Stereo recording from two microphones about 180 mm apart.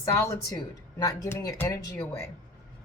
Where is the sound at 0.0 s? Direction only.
15° left (ahead or behind).